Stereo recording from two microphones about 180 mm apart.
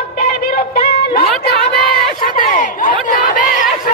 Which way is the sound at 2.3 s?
45° left (ahead or behind).